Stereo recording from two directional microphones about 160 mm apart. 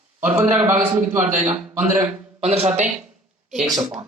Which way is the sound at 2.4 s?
40° right (ahead or behind).